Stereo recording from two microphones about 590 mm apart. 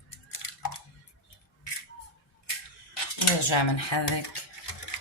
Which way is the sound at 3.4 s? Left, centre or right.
Left.